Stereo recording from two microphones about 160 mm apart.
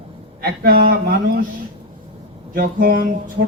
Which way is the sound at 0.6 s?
70° right (ahead or behind).